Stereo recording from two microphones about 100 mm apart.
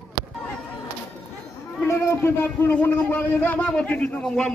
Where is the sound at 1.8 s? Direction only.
25° left (ahead or behind); by 4.5 s 5° left (ahead or behind).